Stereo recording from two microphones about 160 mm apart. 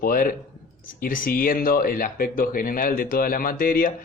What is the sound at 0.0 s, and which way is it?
Speech, 60° left (ahead or behind).